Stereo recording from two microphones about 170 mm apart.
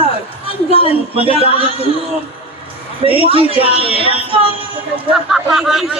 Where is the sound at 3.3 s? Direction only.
35° right (ahead or behind).